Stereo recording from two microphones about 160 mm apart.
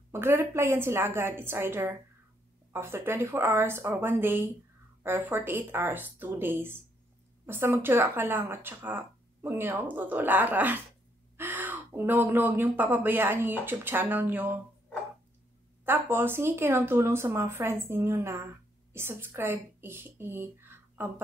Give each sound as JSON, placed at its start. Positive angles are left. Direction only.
{"t": 0.1, "sound": "speech", "side_deg": -15}
{"t": 15.8, "sound": "a woman's voice", "side_deg": -15}